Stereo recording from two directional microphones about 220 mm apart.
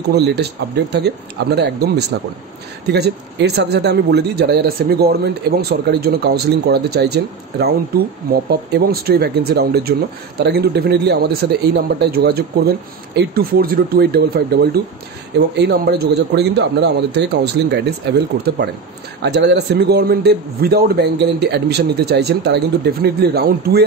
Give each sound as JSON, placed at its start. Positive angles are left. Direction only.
{"t": 0.1, "sound": "speech", "side_deg": -50}